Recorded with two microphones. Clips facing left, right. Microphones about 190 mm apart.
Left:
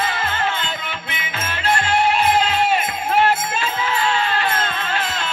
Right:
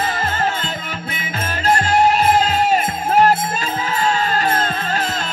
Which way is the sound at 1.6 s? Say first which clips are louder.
Right 3 dB; 40° right (ahead or behind).